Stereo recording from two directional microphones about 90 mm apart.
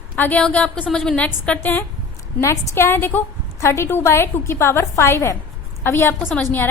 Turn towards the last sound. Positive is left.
turn(degrees=20)  # may be behind; listen again after turning